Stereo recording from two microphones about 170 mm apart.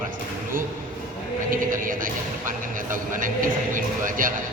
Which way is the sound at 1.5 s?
55° right (ahead or behind).